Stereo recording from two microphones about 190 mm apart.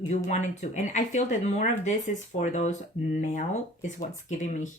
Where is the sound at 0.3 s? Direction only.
40° left (ahead or behind).